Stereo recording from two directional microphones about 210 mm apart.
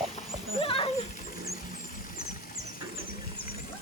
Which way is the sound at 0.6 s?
25° left (ahead or behind).